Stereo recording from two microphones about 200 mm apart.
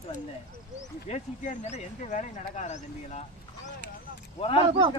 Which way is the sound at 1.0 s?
35° left (ahead or behind).